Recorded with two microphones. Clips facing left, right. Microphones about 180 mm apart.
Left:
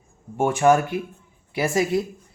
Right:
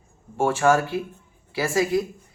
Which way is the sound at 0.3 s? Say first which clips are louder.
Left 2 dB; 15° left (ahead or behind).